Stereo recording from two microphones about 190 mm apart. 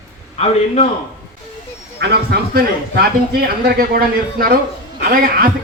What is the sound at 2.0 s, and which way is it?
Speech, 60° right (ahead or behind).